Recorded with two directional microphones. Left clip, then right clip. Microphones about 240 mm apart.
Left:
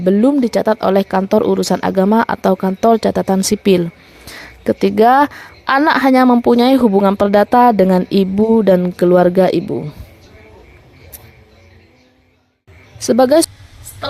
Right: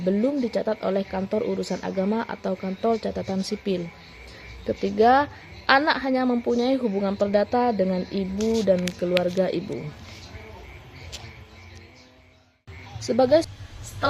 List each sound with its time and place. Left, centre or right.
0.0 s a woman's voice: left
13.0 s speech: left